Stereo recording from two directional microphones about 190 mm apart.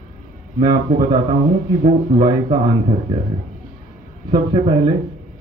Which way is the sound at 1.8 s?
25° right (ahead or behind).